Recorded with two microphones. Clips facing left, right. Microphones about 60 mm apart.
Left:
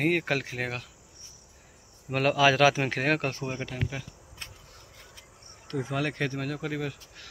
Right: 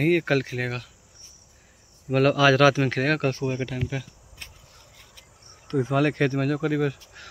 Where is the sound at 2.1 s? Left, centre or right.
Centre.